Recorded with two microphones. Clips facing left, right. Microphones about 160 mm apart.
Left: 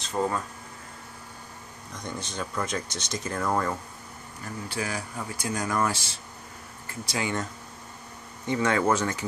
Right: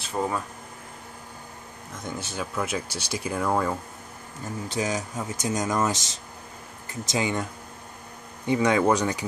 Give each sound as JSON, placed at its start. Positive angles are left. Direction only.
{"t": 0.0, "sound": "speech", "side_deg": -10}
{"t": 2.0, "sound": "speech", "side_deg": -5}
{"t": 4.6, "sound": "speech", "side_deg": -20}
{"t": 8.5, "sound": "speech", "side_deg": -15}